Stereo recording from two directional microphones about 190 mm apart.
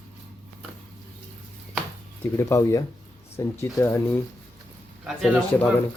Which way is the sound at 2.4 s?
15° left (ahead or behind).